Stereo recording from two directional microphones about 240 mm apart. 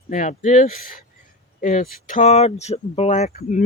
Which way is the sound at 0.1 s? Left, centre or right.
Left.